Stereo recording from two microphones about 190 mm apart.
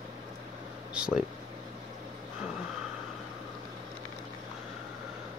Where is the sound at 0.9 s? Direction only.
5° right (ahead or behind).